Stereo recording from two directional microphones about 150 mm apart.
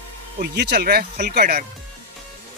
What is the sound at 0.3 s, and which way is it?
Speech, 90° right.